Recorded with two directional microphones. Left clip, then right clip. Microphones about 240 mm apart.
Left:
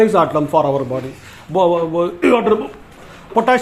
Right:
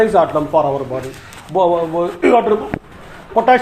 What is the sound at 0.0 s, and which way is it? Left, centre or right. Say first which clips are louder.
Speech: even; left.